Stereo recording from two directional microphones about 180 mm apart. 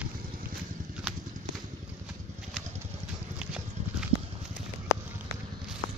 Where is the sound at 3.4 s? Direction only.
5° right (ahead or behind).